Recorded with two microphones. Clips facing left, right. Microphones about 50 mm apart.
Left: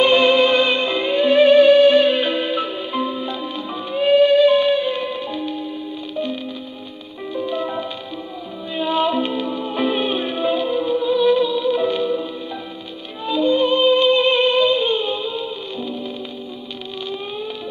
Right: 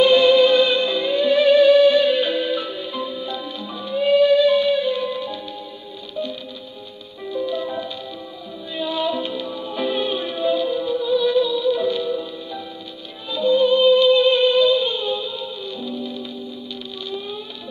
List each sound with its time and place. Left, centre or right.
0.0 s music: left
7.3 s music: left
13.3 s music: left